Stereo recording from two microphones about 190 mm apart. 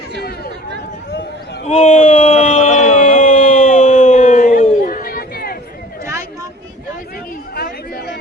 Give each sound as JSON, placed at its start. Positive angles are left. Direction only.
{"t": 0.2, "sound": "chatter", "side_deg": 55}
{"t": 1.6, "sound": "a sound", "side_deg": 30}
{"t": 7.5, "sound": "chatter", "side_deg": 55}